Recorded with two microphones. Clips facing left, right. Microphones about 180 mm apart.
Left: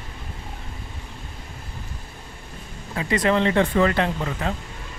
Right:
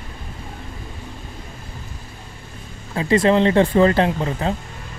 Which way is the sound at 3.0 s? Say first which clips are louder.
Right 5 dB; 30° right (ahead or behind).